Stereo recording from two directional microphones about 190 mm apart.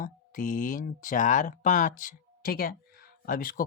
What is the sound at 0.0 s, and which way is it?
Speech, 45° left (ahead or behind).